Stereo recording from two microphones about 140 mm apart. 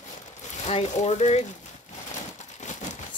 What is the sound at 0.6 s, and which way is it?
Speech, 50° left (ahead or behind).